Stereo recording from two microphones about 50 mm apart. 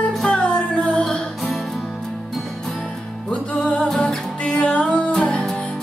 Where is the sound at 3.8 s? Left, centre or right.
Centre.